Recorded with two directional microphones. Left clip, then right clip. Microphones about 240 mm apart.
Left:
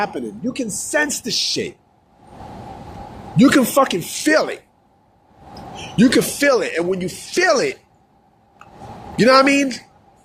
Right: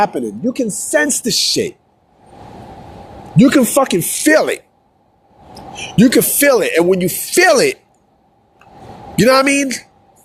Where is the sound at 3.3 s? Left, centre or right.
Right.